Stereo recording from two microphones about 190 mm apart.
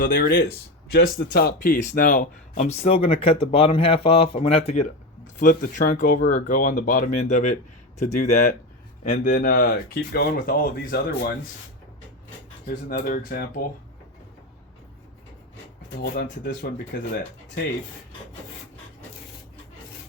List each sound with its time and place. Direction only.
0.0 s speech: 50° left (ahead or behind); by 4.9 s 35° left (ahead or behind)
5.4 s speech: 45° left (ahead or behind)
12.6 s speech: 45° left (ahead or behind)
16.0 s speech: 55° left (ahead or behind)